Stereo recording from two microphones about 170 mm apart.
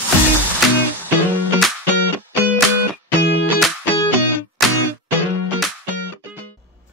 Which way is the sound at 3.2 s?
80° left.